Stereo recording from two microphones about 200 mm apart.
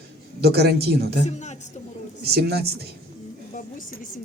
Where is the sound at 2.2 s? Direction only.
55° right (ahead or behind).